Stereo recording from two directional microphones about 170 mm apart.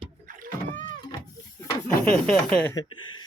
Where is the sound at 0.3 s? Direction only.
55° right (ahead or behind).